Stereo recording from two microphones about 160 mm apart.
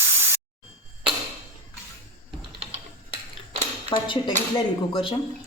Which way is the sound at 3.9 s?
25° left (ahead or behind).